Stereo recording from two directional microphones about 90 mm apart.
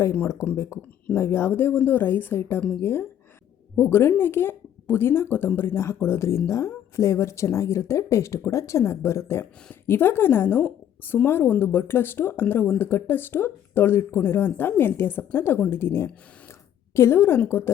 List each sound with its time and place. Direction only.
0.0 s a woman's voice: 25° left (ahead or behind)
0.5 s a woman's voice: 35° left (ahead or behind)
0.8 s a woman's voice: 20° left (ahead or behind)